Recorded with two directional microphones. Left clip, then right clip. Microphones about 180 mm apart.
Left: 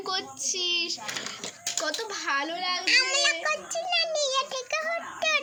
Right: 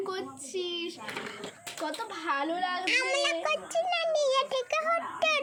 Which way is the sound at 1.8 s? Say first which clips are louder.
Left 2 dB; 40° left (ahead or behind).